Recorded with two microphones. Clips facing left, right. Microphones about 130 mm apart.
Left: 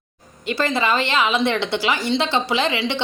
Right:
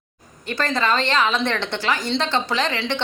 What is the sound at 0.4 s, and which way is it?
Speech, 10° left (ahead or behind).